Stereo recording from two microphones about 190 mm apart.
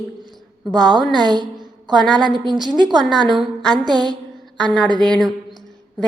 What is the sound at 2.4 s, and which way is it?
A woman's voice, 25° right (ahead or behind).